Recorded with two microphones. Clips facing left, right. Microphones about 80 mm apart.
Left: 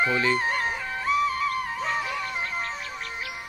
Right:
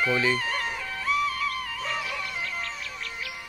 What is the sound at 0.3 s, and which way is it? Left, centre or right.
Music, left.